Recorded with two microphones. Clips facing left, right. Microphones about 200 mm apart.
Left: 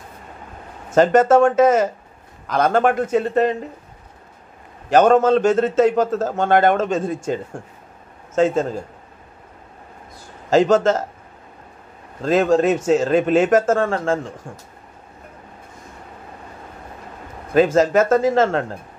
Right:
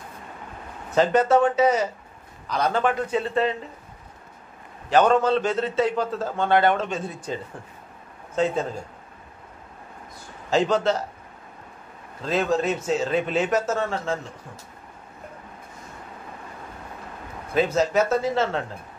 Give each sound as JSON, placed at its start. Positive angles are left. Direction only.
{"t": 0.8, "sound": "a man's voice", "side_deg": 45}
{"t": 4.8, "sound": "a man's voice", "side_deg": 45}
{"t": 10.5, "sound": "a man's voice", "side_deg": 45}
{"t": 12.2, "sound": "a man's voice", "side_deg": 45}
{"t": 17.7, "sound": "a man's voice", "side_deg": 50}